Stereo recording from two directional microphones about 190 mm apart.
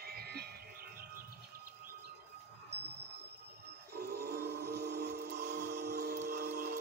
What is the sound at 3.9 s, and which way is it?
Music, 55° right (ahead or behind).